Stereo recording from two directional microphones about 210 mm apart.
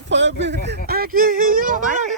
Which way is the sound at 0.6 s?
45° right (ahead or behind).